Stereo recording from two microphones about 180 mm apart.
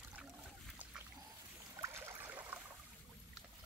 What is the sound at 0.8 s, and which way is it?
Dog, 10° right (ahead or behind).